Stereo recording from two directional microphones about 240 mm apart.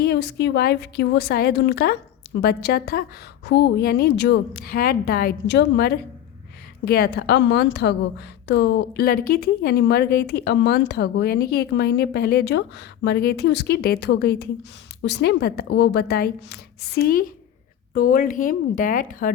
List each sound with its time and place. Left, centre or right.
0.0 s a woman's voice: left